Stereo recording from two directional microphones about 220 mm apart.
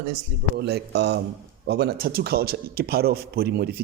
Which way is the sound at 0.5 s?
50° right (ahead or behind).